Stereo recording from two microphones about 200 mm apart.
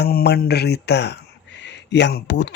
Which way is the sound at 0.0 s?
50° left (ahead or behind).